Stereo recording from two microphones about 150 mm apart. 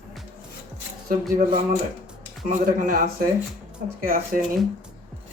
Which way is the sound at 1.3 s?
55° right (ahead or behind).